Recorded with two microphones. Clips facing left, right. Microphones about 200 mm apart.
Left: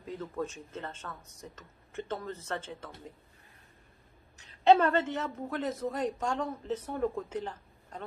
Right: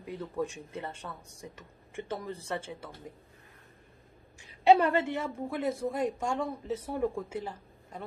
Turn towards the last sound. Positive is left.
turn(degrees=-10)  # may be behind; listen again after turning